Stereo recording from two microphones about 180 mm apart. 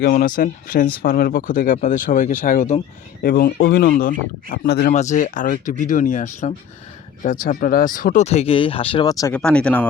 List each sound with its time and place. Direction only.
0.0 s speech: 50° left (ahead or behind)
3.2 s speech: 55° left (ahead or behind)
4.9 s speech: 40° left (ahead or behind); by 9.3 s 25° left (ahead or behind)
9.3 s speech: 5° left (ahead or behind)